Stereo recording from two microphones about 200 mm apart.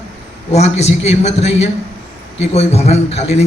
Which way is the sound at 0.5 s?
35° left (ahead or behind).